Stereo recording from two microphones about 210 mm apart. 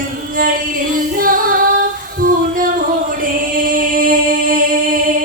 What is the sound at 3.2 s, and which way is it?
Singing, 40° right (ahead or behind).